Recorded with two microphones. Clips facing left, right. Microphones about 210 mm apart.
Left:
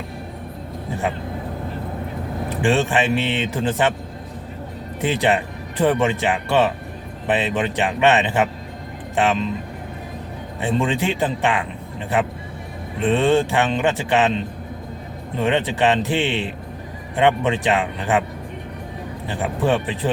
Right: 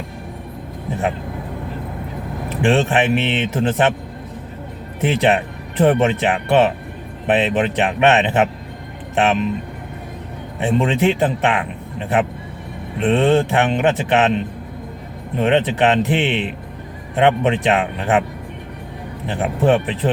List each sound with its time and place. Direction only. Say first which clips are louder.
2.5 s speech: right 3 dB; 20° right (ahead or behind)
4.9 s speech: right 3 dB; 20° right (ahead or behind)
10.6 s speech: right 4 dB; 20° right (ahead or behind)
15.4 s speech: right 3 dB; 20° right (ahead or behind)
19.3 s speech: right 4 dB; 20° right (ahead or behind)